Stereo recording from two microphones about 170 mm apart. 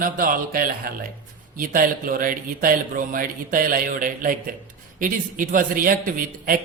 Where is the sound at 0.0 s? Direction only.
55° right (ahead or behind).